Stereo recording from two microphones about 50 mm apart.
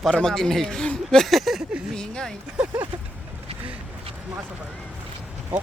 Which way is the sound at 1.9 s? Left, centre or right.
Centre.